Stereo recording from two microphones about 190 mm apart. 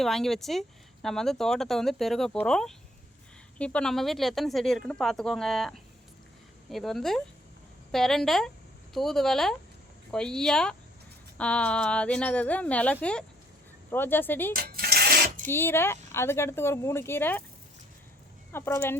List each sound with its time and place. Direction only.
0.0 s speech: centre (ahead or behind)
14.5 s sewing machine: 50° right (ahead or behind)
15.4 s speech: 10° left (ahead or behind)
18.5 s speech: 10° left (ahead or behind)